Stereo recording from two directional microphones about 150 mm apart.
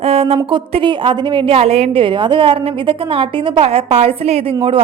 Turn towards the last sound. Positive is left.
turn(degrees=-40)  # may be behind; listen again after turning